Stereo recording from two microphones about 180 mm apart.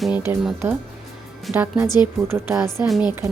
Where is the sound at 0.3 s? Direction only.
10° right (ahead or behind).